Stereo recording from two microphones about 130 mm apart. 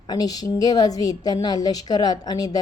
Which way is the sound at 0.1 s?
30° left (ahead or behind).